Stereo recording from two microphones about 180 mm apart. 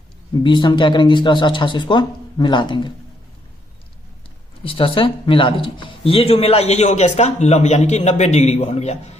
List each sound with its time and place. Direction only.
0.4 s speech: 25° left (ahead or behind)
4.6 s speech: 30° left (ahead or behind)